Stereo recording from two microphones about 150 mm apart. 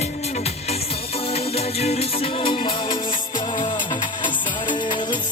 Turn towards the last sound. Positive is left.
turn(degrees=30)  # may be behind; listen again after turning